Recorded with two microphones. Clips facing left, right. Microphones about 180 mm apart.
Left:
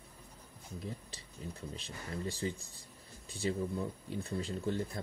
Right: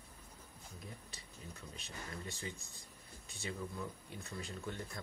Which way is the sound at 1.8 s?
30° left (ahead or behind).